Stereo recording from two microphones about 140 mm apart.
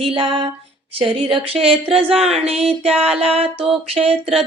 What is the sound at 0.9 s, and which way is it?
Speech, 40° right (ahead or behind).